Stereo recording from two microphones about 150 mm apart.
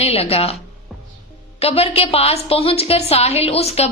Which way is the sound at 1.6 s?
40° left (ahead or behind).